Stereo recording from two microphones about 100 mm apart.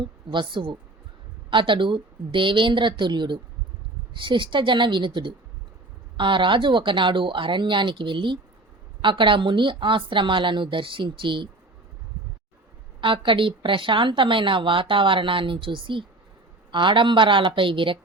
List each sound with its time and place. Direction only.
0.0 s a woman's voice: 50° right (ahead or behind)
13.0 s a woman's voice: 55° right (ahead or behind)